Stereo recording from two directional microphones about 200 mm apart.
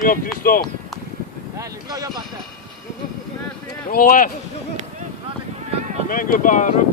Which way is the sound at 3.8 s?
45° left (ahead or behind).